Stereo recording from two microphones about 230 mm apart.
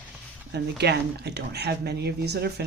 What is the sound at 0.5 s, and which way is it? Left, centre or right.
Speech, right.